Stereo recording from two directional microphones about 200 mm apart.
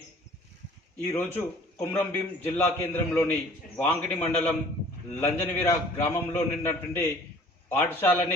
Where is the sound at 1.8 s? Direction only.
10° left (ahead or behind).